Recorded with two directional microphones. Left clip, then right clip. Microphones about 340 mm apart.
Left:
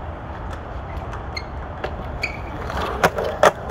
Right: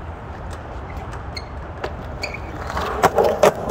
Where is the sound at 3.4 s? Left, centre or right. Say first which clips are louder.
Left 2 dB; right.